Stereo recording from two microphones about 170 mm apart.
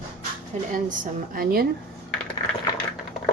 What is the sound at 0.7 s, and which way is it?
Speech, 50° right (ahead or behind).